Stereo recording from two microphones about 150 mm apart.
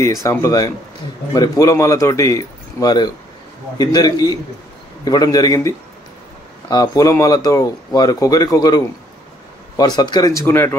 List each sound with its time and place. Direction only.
0.0 s speech: 20° left (ahead or behind)